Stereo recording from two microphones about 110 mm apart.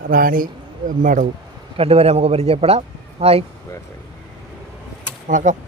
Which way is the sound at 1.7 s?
65° right (ahead or behind).